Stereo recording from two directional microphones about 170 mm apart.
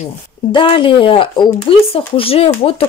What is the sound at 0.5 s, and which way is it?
Speech, 30° left (ahead or behind).